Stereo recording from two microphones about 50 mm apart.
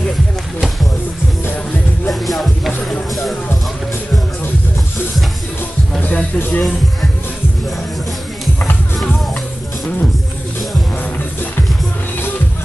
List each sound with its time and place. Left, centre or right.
2.2 s music: centre
6.0 s music: left